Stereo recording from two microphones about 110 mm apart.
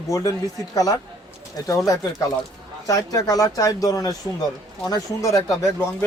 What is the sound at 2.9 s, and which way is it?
Speech, 35° left (ahead or behind).